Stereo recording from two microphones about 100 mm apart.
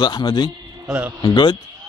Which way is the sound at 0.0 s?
45° left (ahead or behind).